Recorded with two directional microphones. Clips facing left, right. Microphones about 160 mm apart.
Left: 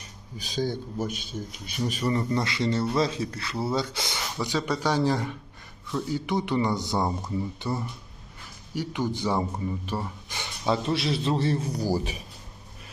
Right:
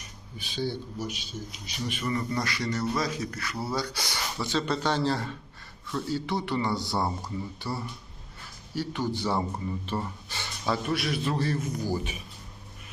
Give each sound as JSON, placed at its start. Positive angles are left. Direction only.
{"t": 0.3, "sound": "a man's voice", "side_deg": 40}